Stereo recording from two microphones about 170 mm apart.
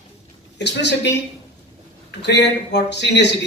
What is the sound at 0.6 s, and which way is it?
Speech, 90° left.